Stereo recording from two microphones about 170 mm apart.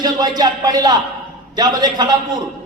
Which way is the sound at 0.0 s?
25° right (ahead or behind).